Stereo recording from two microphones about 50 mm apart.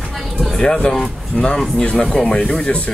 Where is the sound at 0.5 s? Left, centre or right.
Centre.